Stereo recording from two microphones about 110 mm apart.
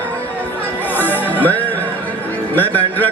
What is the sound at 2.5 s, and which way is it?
Speech, 15° left (ahead or behind).